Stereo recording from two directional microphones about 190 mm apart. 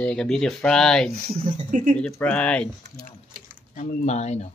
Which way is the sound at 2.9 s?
45° right (ahead or behind).